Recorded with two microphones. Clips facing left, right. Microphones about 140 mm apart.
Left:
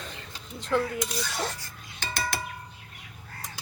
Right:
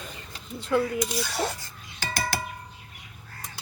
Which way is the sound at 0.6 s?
5° right (ahead or behind).